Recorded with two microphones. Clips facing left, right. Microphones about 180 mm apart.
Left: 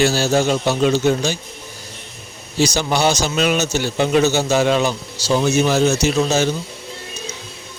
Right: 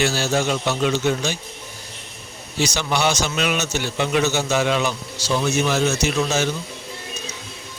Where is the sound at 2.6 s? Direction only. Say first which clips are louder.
Left 4 dB; 35° left (ahead or behind).